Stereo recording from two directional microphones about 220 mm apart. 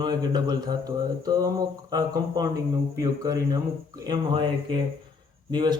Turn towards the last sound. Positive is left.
turn(degrees=-20)  # may be behind; listen again after turning